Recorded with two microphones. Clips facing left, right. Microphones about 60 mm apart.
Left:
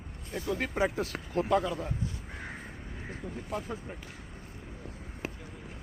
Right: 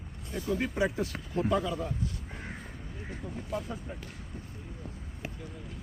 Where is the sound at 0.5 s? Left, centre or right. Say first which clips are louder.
Even; left.